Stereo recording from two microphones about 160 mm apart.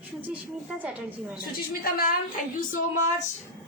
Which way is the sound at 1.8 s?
65° left (ahead or behind).